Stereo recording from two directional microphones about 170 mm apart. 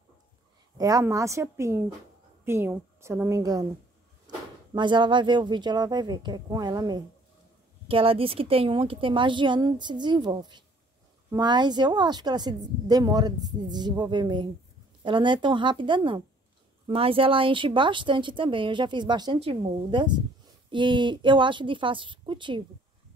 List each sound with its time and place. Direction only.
0.7 s a woman's voice: 20° right (ahead or behind)
4.7 s a woman's voice: 25° right (ahead or behind)